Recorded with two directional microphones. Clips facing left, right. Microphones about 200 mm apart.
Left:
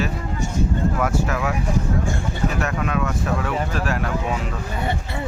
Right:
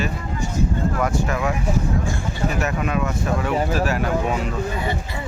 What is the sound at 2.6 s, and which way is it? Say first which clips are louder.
Speech: right 1 dB; 5° right (ahead or behind).